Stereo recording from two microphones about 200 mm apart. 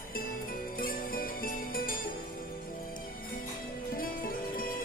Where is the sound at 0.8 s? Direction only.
45° left (ahead or behind).